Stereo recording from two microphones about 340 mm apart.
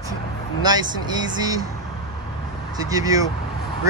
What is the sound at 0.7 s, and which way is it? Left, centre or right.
Speech, centre.